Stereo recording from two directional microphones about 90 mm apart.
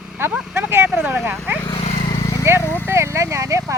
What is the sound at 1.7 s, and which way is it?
Vehicle, 60° left (ahead or behind).